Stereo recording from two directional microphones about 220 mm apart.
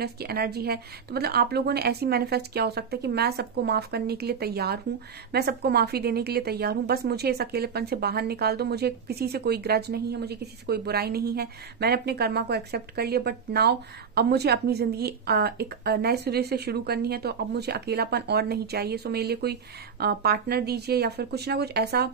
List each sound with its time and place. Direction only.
0.0 s a woman's voice: 45° right (ahead or behind)